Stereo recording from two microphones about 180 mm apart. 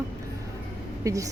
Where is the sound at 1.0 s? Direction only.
20° right (ahead or behind).